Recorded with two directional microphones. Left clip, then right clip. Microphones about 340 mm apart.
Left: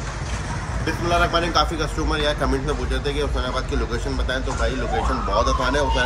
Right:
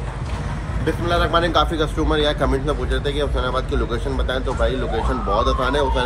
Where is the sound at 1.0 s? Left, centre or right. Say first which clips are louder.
Right 1 dB; centre.